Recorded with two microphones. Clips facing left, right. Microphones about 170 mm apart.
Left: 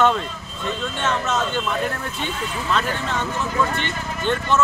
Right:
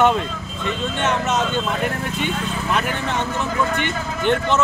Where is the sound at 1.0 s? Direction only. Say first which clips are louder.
Right 2 dB; 20° right (ahead or behind).